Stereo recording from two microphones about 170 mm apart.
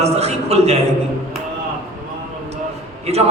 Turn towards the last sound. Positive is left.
turn(degrees=-40)  # may be behind; listen again after turning